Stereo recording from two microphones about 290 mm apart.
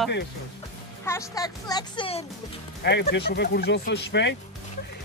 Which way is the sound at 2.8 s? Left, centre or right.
Left.